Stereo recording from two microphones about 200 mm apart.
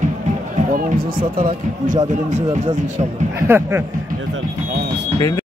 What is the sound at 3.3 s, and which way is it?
Speech, 10° right (ahead or behind).